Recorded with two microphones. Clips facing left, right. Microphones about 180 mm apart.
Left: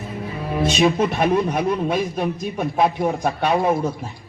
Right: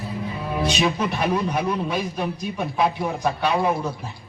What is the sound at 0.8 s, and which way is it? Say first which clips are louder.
A man's voice: left 5 dB; 50° left (ahead or behind).